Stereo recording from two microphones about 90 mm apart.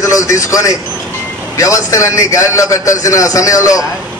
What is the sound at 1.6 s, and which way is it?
A man's voice, 35° left (ahead or behind).